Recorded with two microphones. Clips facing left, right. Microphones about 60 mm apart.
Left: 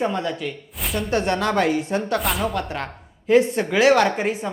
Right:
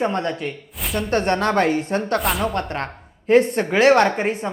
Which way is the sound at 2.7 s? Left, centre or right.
Right.